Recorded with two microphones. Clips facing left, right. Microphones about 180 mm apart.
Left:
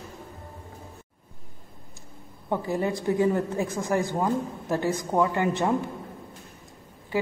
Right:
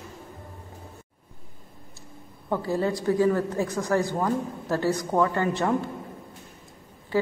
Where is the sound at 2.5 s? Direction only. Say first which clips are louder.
Right 1 dB; 15° left (ahead or behind).